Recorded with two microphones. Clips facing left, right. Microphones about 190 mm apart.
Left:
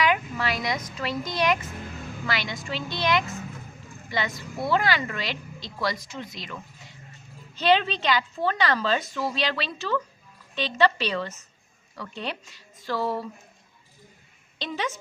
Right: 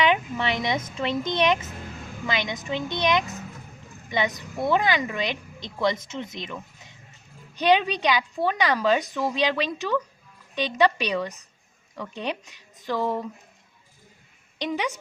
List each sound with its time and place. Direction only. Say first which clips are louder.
0.0 s a woman's voice: right 2 dB; 25° right (ahead or behind)
14.6 s a woman's voice: right 3 dB; 15° right (ahead or behind)